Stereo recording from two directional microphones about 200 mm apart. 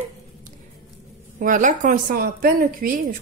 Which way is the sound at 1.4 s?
40° right (ahead or behind).